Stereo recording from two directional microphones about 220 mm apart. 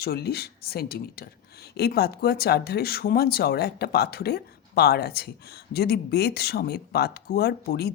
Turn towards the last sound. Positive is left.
turn(degrees=45)  # may be behind; listen again after turning